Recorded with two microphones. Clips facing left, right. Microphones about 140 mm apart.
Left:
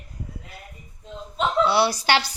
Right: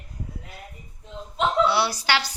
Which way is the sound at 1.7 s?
20° left (ahead or behind).